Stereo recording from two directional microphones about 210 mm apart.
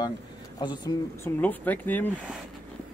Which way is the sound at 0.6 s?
20° left (ahead or behind).